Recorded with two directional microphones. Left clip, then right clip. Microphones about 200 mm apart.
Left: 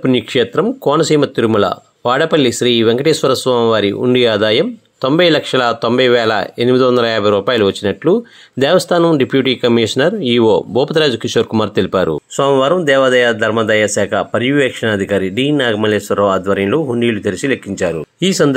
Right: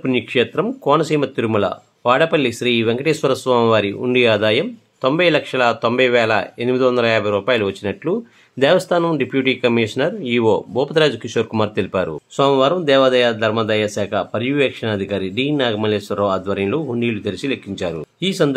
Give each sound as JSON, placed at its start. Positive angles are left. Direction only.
{"t": 0.0, "sound": "speech", "side_deg": 30}
{"t": 12.4, "sound": "speech", "side_deg": 20}
{"t": 18.2, "sound": "speech", "side_deg": 35}